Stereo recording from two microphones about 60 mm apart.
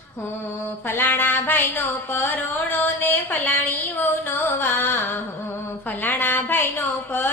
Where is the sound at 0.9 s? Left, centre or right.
Left.